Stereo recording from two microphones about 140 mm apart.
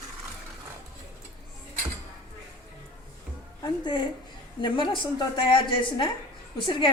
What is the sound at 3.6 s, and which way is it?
A woman's voice, 35° left (ahead or behind).